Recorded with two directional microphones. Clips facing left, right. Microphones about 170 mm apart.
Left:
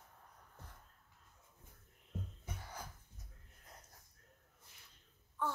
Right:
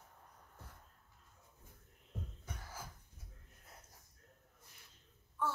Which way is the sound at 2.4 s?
5° right (ahead or behind).